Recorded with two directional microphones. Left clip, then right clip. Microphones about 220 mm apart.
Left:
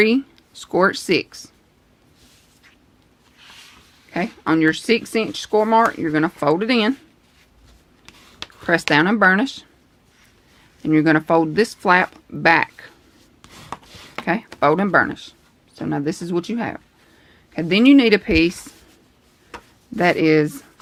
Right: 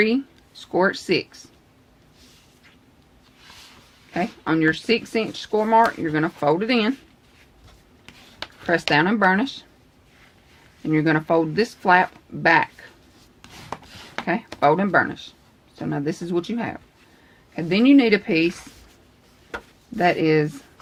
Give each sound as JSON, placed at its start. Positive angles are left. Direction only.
{"t": 0.0, "sound": "speech", "side_deg": 35}
{"t": 4.1, "sound": "speech", "side_deg": 30}
{"t": 8.1, "sound": "a sound", "side_deg": 20}
{"t": 8.9, "sound": "speech", "side_deg": 35}
{"t": 10.8, "sound": "speech", "side_deg": 35}
{"t": 14.3, "sound": "speech", "side_deg": 35}
{"t": 20.0, "sound": "speech", "side_deg": 35}